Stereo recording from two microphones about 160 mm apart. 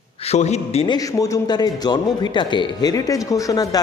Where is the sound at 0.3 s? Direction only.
45° left (ahead or behind).